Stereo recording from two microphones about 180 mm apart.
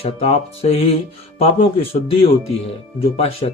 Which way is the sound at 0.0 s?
35° left (ahead or behind).